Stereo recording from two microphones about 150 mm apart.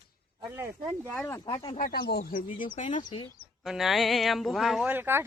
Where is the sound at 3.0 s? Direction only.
35° left (ahead or behind).